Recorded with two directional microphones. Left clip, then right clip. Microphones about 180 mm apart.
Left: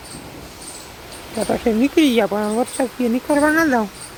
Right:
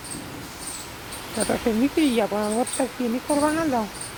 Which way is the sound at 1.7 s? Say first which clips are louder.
Left 7 dB; 25° left (ahead or behind).